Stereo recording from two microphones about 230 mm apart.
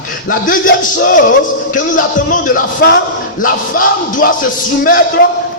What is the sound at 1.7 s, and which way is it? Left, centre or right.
Speech, left.